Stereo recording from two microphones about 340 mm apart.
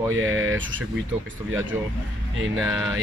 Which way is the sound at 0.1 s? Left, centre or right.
Right.